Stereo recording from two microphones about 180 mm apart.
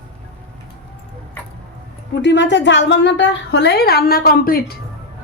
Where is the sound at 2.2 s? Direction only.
85° left; by 4.7 s 55° left (ahead or behind).